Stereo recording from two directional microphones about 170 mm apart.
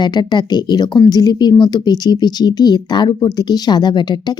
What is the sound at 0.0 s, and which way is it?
Speech, 25° left (ahead or behind).